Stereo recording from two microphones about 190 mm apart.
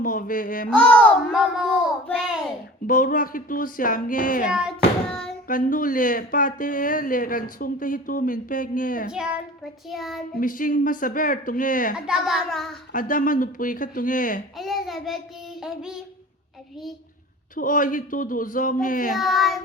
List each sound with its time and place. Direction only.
0.0 s speech: 45° left (ahead or behind)
0.7 s a child's voice: 5° left (ahead or behind)
2.8 s speech: 45° left (ahead or behind)
5.5 s speech: 45° left (ahead or behind)
9.1 s a child's voice: 5° right (ahead or behind)
10.3 s speech: 45° left (ahead or behind)
12.0 s a child's voice: centre (ahead or behind)
12.9 s speech: 45° left (ahead or behind)
14.6 s a child's voice: centre (ahead or behind)
17.5 s speech: 45° left (ahead or behind)
19.1 s a child's voice: centre (ahead or behind)